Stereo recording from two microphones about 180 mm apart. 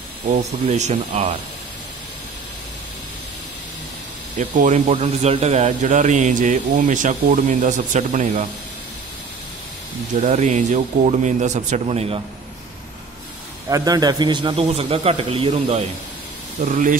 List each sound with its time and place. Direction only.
0.3 s a man's voice: 40° right (ahead or behind)
4.4 s speech: 45° right (ahead or behind)
10.2 s a man's voice: 40° right (ahead or behind)
13.7 s a man's voice: 20° right (ahead or behind); by 17.0 s 45° right (ahead or behind)